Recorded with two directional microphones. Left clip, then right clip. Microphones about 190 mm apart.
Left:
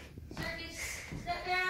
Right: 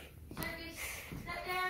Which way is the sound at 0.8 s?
Centre (ahead or behind).